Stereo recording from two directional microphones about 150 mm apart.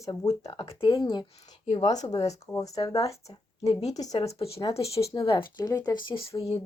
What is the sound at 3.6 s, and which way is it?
A woman's voice, 45° left (ahead or behind).